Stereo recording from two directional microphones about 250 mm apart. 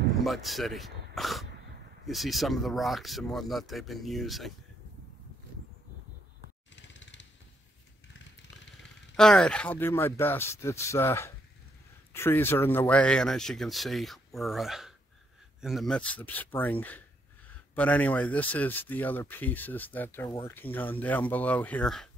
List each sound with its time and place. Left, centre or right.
0.2 s speech: centre
6.7 s vehicle: left
9.1 s speech: centre
17.7 s speech: centre